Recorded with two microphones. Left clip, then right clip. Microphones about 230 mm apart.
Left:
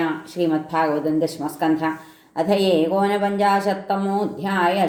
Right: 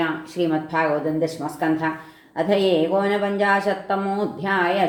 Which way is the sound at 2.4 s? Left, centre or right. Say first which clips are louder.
Left 1 dB; left.